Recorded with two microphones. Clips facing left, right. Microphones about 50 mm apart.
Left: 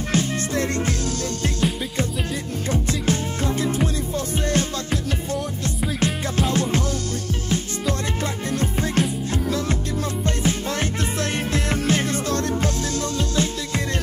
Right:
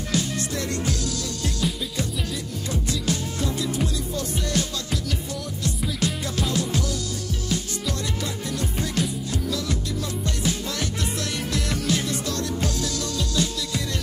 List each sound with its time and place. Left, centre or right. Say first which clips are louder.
0.1 s music: left 4 dB; left
10.2 s music: left 4 dB; left